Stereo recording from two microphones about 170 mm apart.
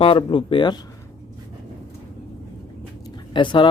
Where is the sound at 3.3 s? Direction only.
30° left (ahead or behind).